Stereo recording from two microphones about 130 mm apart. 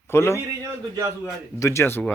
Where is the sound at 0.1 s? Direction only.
20° left (ahead or behind).